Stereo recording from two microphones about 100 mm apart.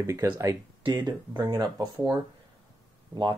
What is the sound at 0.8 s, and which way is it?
Speech, 45° right (ahead or behind).